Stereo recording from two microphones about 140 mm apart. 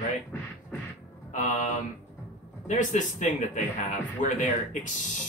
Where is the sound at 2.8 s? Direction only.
65° left (ahead or behind).